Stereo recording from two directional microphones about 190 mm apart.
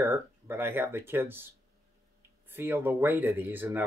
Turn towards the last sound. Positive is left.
turn(degrees=-10)  # may be behind; listen again after turning